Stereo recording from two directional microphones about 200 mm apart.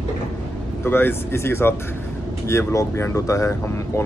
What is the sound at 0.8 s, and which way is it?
Speech, 10° left (ahead or behind).